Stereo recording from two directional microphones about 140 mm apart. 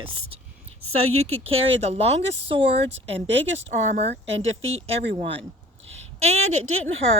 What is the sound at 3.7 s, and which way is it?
Speech, 55° right (ahead or behind).